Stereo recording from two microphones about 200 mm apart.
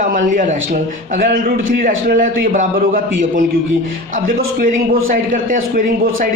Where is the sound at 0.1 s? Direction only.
40° right (ahead or behind).